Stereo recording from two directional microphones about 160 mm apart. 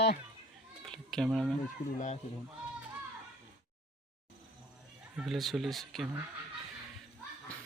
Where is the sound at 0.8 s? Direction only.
5° left (ahead or behind).